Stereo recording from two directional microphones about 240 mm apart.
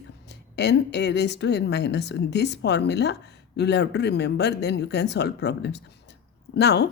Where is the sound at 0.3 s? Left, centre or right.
Left.